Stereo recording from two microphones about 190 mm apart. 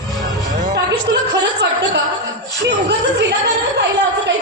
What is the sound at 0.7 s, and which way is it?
Music, 60° right (ahead or behind).